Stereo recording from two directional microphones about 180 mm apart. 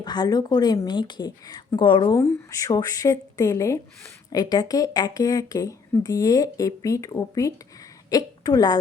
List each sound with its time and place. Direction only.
0.0 s a woman's voice: 25° left (ahead or behind)